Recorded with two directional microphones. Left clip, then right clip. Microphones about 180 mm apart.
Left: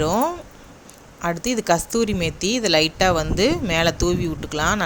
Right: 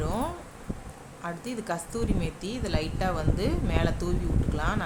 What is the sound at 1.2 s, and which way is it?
Speech, 35° left (ahead or behind).